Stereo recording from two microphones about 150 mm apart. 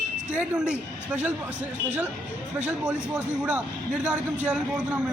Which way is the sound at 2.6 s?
5° right (ahead or behind).